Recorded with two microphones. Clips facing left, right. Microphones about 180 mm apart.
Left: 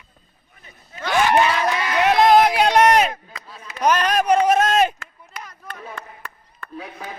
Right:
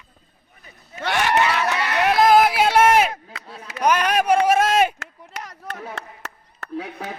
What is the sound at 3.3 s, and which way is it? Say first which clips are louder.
Chopping: right 1 dB; 75° right (ahead or behind).